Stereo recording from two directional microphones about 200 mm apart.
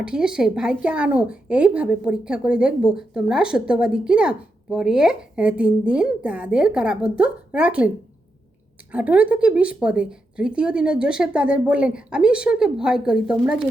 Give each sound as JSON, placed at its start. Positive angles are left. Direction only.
{"t": 0.0, "sound": "a woman's voice", "side_deg": -5}
{"t": 8.9, "sound": "a woman's voice", "side_deg": -5}